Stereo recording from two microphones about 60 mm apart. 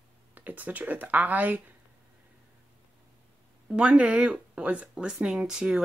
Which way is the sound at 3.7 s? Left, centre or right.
Right.